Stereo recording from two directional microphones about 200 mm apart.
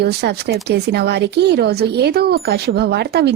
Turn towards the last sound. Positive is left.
turn(degrees=-55)  # may be behind; listen again after turning